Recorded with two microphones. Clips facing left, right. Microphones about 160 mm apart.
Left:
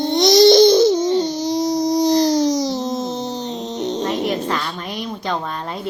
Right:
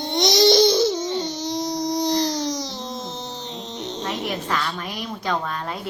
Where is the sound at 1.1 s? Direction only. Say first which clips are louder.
Left 7 dB; 40° left (ahead or behind).